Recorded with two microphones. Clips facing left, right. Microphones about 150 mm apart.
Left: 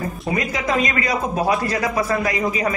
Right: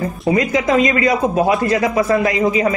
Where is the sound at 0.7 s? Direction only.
25° right (ahead or behind).